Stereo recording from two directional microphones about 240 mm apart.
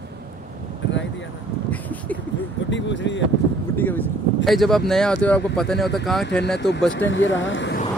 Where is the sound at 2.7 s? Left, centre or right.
Left.